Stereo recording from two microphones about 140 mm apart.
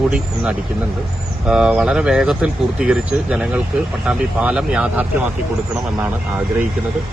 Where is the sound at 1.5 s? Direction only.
5° right (ahead or behind).